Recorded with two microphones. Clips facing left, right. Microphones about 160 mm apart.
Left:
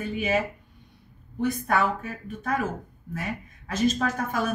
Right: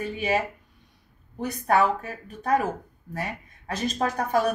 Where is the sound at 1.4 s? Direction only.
35° right (ahead or behind).